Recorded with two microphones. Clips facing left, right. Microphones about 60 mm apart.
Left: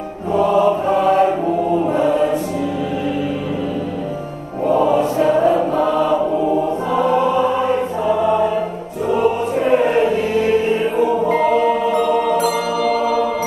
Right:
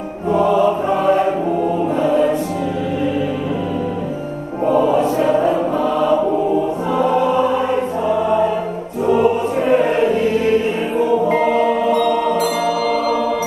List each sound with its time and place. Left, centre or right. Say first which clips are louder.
0.3 s music: right 1 dB; right
0.8 s choir: left 1 dB; centre
4.8 s choir: even; centre
9.1 s choir: right 2 dB; centre
9.8 s music: even; centre
11.5 s music: even; centre